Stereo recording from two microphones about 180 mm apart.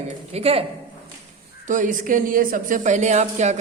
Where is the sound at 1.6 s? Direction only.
45° right (ahead or behind).